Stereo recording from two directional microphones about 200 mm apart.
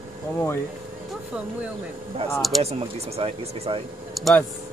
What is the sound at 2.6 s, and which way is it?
Speech, 30° right (ahead or behind).